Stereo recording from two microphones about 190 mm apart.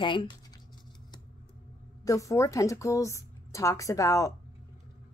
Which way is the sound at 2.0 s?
15° left (ahead or behind).